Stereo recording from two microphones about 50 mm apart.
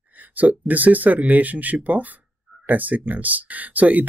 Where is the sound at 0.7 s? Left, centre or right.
Right.